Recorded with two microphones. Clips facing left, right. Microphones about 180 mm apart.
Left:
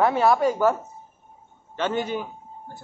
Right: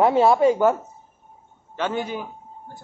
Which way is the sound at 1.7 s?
10° right (ahead or behind).